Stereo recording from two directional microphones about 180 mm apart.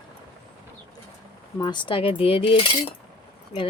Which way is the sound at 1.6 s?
25° left (ahead or behind).